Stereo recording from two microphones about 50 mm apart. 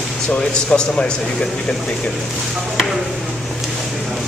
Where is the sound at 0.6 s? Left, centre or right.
Centre.